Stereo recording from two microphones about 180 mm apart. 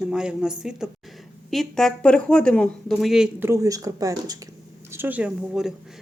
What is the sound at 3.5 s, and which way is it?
Speech, 20° right (ahead or behind).